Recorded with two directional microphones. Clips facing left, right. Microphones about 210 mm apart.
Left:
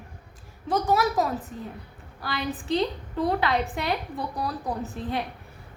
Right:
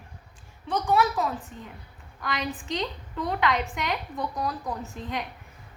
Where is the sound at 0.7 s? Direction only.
40° left (ahead or behind).